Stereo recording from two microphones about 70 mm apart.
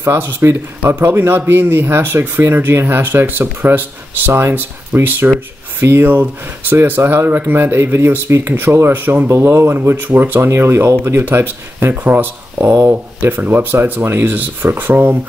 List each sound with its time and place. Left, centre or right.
0.0 s speech: right
9.3 s speech: right